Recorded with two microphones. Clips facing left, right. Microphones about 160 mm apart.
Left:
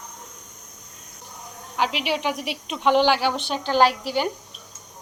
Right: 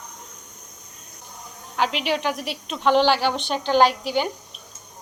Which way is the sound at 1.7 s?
10° left (ahead or behind).